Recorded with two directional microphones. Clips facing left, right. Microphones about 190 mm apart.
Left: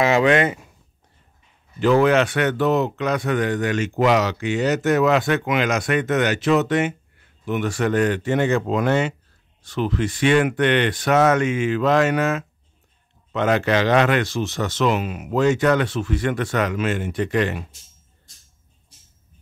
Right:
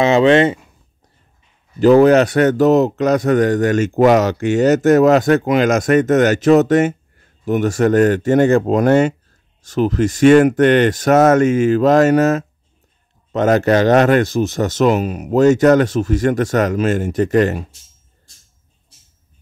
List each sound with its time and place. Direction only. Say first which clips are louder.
0.0 s speech: right 6 dB; 25° right (ahead or behind)
1.8 s speech: right 7 dB; 40° right (ahead or behind)